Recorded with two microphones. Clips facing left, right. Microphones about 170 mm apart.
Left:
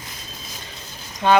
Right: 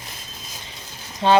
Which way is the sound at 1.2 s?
30° right (ahead or behind).